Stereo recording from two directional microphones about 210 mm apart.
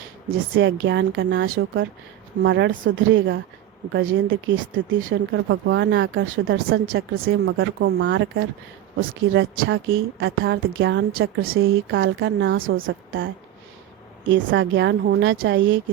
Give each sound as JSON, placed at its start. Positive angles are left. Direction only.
{"t": 0.3, "sound": "a woman's voice", "side_deg": -65}
{"t": 2.4, "sound": "a woman's voice", "side_deg": -60}
{"t": 11.6, "sound": "speech", "side_deg": -70}